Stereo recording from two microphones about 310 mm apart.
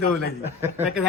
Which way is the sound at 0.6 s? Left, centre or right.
Centre.